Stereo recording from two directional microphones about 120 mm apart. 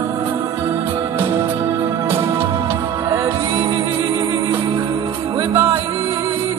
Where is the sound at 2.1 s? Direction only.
20° right (ahead or behind).